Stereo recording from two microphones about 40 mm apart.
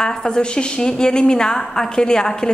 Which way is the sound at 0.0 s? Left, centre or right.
Left.